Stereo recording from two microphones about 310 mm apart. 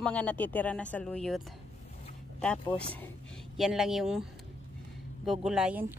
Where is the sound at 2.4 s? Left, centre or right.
Centre.